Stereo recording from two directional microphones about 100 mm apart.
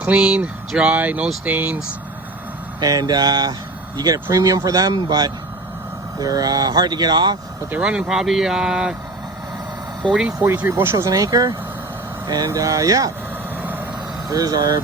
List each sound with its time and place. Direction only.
0.0 s speech: 10° right (ahead or behind)
2.8 s speech: 40° right (ahead or behind)
7.7 s speech: 10° right (ahead or behind)
10.1 s speech: 10° right (ahead or behind)
10.3 s speech: 30° right (ahead or behind)
10.9 s speech: 35° right (ahead or behind)
13.6 s vehicle: 20° right (ahead or behind)
14.3 s speech: 40° right (ahead or behind)